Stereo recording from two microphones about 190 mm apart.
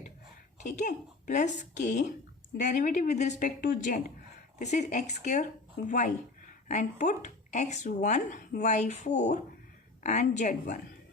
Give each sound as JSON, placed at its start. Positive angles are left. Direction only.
{"t": 0.6, "sound": "speech", "side_deg": 40}